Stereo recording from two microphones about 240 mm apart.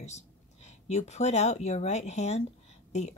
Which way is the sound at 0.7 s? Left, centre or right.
Left.